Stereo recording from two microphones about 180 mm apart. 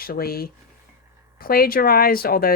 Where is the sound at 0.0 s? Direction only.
55° left (ahead or behind).